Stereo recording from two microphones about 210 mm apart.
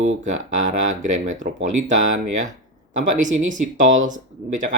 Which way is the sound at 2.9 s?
35° right (ahead or behind).